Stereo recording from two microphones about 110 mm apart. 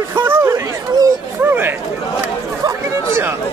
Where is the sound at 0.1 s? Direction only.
20° right (ahead or behind).